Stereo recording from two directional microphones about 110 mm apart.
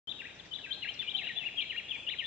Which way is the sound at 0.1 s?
15° right (ahead or behind).